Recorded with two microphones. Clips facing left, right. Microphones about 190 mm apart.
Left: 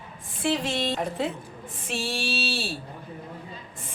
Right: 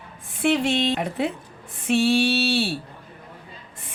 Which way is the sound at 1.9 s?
65° right (ahead or behind).